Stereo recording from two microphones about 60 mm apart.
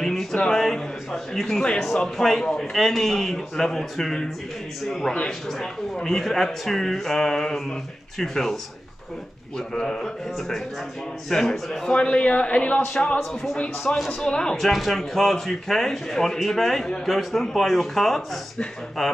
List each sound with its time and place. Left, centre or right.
0.0 s music: centre
0.5 s a sound: centre
2.0 s speech: centre
5.5 s speech: centre
9.8 s a man's voice: centre
11.9 s a man's voice: centre
13.2 s speech: centre
14.2 s a man's voice: centre
14.7 s speech: centre